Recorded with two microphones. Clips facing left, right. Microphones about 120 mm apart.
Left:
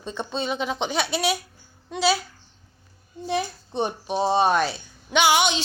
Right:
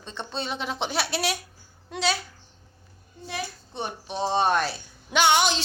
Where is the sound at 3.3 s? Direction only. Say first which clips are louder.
Left 8 dB; 20° left (ahead or behind); by 5.6 s centre (ahead or behind).